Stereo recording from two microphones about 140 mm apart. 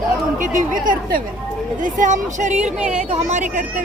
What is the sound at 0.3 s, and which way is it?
A woman's voice, 70° right (ahead or behind).